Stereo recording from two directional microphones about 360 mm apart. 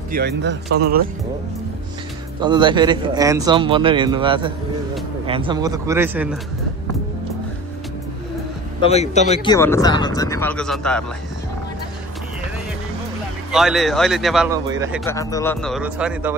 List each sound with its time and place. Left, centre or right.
0.1 s speech: right
2.4 s a man's voice: centre
8.9 s speech: centre
13.5 s a man's voice: centre
15.0 s a man's voice: centre